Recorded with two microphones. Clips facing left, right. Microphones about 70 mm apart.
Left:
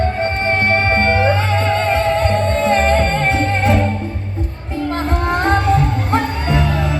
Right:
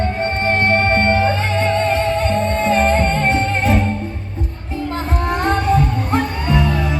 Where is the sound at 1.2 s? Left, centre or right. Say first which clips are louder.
Left 1 dB; left.